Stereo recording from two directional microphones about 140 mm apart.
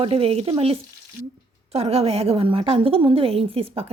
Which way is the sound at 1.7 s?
45° right (ahead or behind).